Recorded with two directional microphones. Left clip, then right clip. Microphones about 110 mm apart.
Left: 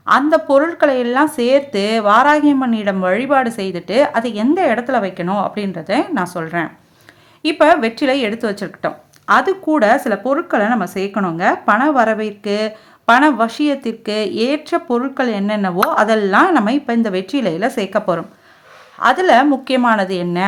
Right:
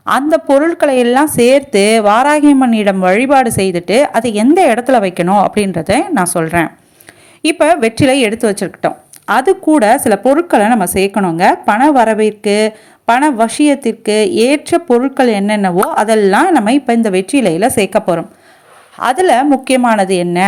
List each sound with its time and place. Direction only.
0.0 s speech: 45° right (ahead or behind)
2.2 s a woman's voice: 45° right (ahead or behind)
7.4 s speech: 40° right (ahead or behind)